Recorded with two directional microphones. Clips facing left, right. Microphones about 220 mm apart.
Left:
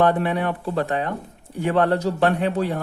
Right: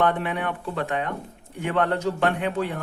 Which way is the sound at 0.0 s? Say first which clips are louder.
Left 4 dB; 35° left (ahead or behind).